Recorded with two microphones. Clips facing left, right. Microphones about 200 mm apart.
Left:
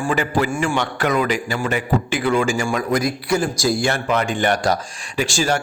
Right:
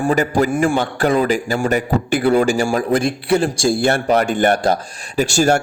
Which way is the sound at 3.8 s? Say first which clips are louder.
Right 5 dB; 45° right (ahead or behind).